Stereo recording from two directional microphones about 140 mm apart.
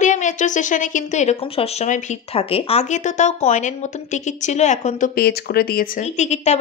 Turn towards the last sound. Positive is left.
turn(degrees=55)  # may be behind; listen again after turning